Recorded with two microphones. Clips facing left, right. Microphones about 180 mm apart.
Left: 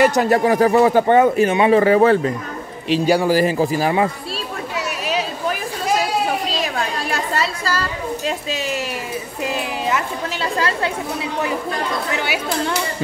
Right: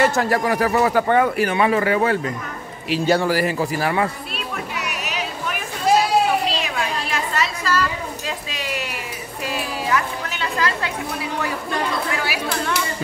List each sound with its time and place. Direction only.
0.0 s a man's voice: 20° left (ahead or behind)
2.9 s children playing: 15° left (ahead or behind)
7.3 s chatter: 30° left (ahead or behind)
8.3 s a sound: 25° left (ahead or behind)
12.1 s chatter: 25° left (ahead or behind)